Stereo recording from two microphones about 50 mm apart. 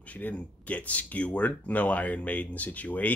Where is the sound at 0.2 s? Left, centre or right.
Left.